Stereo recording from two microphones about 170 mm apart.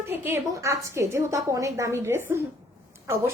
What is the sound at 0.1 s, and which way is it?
A woman's voice, 15° right (ahead or behind).